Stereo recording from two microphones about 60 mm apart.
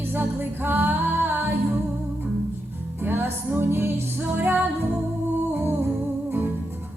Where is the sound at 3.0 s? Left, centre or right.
Right.